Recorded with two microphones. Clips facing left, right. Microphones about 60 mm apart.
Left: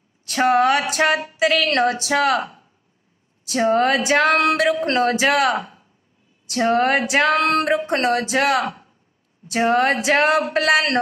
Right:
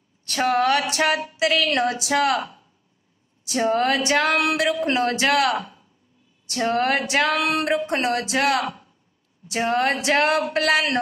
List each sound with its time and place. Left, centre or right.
0.4 s a woman's voice: centre
1.7 s a woman's voice: left
2.0 s a man's voice: centre
2.4 s a sound: left
3.5 s a man's voice: centre
5.6 s a sound: left
6.7 s a man's voice: centre